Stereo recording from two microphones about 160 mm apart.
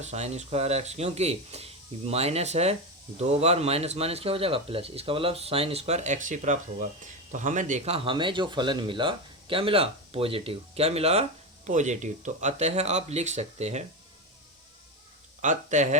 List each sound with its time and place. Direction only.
0.0 s speech: 45° right (ahead or behind)
15.4 s speech: 50° right (ahead or behind)